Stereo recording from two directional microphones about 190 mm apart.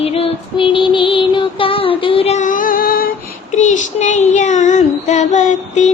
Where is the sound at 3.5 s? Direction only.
40° left (ahead or behind).